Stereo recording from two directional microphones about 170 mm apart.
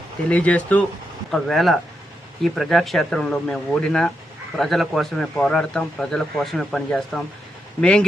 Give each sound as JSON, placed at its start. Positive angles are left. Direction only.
{"t": 0.3, "sound": "speech", "side_deg": 10}